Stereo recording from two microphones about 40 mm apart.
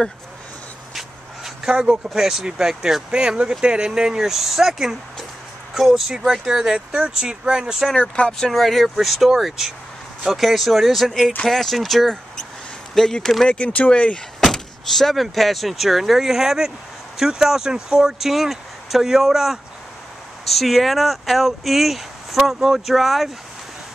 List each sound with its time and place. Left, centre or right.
0.9 s a sound: centre
1.7 s speech: centre
3.1 s speech: right
8.3 s speech: centre
8.8 s speech: centre
13.5 s speech: left
14.4 s speech: centre
18.3 s speech: centre
23.0 s speech: centre